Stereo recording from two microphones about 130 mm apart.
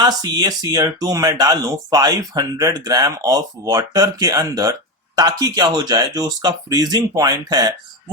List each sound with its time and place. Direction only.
0.0 s speech: 30° right (ahead or behind)